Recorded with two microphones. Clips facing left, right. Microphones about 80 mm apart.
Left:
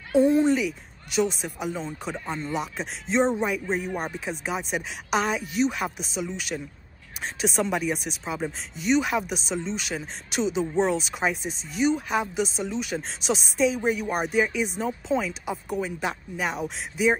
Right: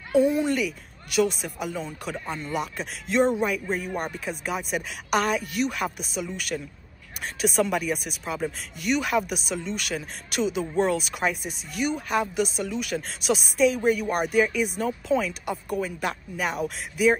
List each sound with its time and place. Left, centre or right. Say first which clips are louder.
0.2 s speech: left 3 dB; left
0.5 s speech: left 3 dB; centre
1.9 s a man's voice: left 1 dB; left
2.5 s speech: even; centre
7.7 s speech: even; centre